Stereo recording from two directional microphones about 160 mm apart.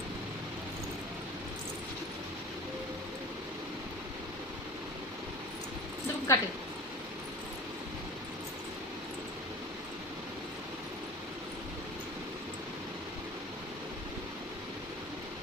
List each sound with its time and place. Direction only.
6.3 s speech: 20° left (ahead or behind)